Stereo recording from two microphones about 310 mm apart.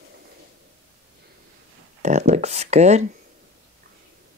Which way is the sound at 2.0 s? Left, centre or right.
Right.